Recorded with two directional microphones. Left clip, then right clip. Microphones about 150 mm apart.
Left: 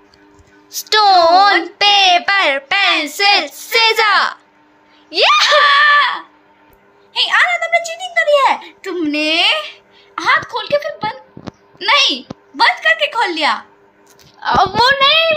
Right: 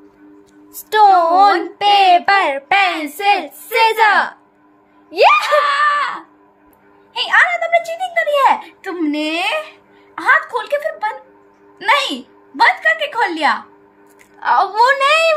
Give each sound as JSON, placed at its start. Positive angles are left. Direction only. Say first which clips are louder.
{"t": 0.7, "sound": "speech", "louder": "right 1 dB", "side_deg": -15}
{"t": 5.6, "sound": "screaming", "louder": "left 5 dB", "side_deg": -35}
{"t": 7.2, "sound": "a child's voice", "louder": "even", "side_deg": -50}
{"t": 14.4, "sound": "a woman's voice", "louder": "left 1 dB", "side_deg": 0}